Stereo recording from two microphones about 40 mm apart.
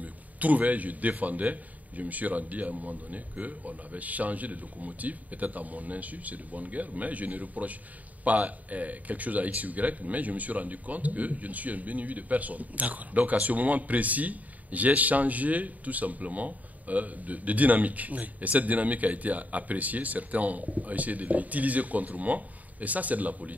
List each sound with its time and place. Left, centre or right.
0.0 s speech: right